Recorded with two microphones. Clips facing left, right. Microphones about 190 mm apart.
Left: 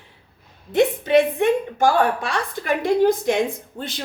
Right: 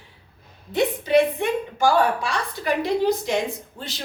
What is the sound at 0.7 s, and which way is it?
A woman's voice, 50° left (ahead or behind).